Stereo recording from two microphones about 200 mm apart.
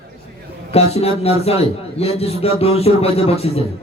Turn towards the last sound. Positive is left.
turn(degrees=30)  # may be behind; listen again after turning